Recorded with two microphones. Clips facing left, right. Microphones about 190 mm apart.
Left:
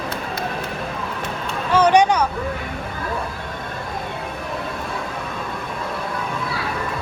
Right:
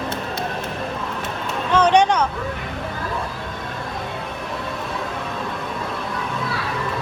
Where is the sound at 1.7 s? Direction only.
10° left (ahead or behind).